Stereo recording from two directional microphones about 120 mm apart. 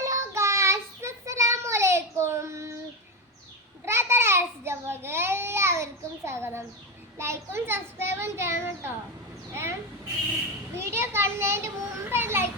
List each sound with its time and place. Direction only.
0.0 s child singing: 25° right (ahead or behind)
3.8 s a sound: 20° right (ahead or behind)
10.8 s children playing: 20° right (ahead or behind)